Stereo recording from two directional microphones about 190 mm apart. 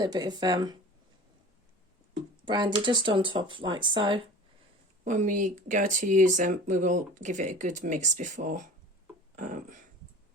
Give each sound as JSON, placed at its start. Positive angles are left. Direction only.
{"t": 0.0, "sound": "speech", "side_deg": -20}
{"t": 2.4, "sound": "speech", "side_deg": -25}
{"t": 5.0, "sound": "speech", "side_deg": -40}
{"t": 9.3, "sound": "beatboxing", "side_deg": -45}